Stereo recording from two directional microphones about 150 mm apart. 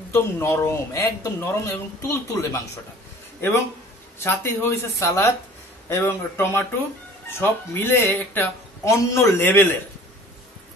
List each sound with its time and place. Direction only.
0.1 s a man's voice: 15° left (ahead or behind)